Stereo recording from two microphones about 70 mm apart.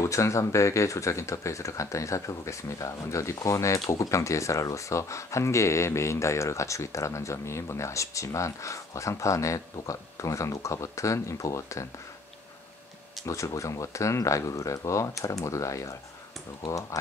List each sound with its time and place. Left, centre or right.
0.0 s speech: left
13.2 s speech: left